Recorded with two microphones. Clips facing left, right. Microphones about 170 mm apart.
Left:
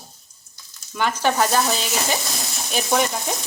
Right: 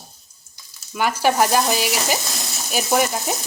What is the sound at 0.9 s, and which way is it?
Frying, 10° right (ahead or behind).